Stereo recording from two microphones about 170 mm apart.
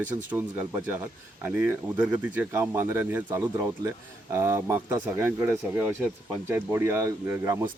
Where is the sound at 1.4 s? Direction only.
10° right (ahead or behind).